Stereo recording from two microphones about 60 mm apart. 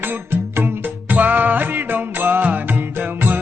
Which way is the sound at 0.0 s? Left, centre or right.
Right.